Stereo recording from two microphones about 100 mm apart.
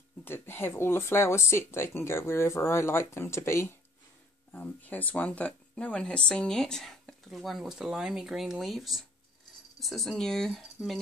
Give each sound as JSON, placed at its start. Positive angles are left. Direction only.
{"t": 0.2, "sound": "speech", "side_deg": 20}
{"t": 4.5, "sound": "speech", "side_deg": 15}